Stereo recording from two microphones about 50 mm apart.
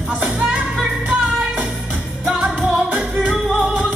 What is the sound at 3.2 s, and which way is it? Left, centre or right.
Music, right.